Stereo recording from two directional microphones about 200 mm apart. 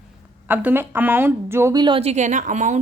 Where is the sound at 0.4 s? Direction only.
10° right (ahead or behind).